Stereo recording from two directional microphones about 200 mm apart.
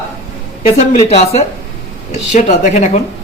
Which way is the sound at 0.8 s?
30° left (ahead or behind).